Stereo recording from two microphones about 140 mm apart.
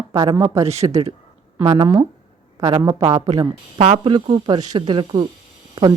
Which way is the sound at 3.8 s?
50° right (ahead or behind).